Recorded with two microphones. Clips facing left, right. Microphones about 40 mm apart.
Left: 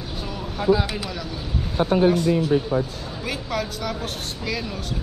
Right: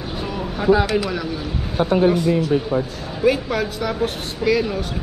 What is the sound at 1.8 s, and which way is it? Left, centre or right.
Speech, right.